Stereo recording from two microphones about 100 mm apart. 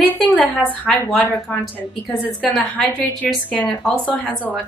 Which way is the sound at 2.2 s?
15° left (ahead or behind).